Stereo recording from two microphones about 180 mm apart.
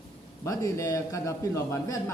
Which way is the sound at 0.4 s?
15° left (ahead or behind).